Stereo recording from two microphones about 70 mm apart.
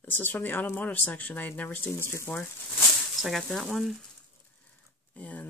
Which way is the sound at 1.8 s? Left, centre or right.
Left.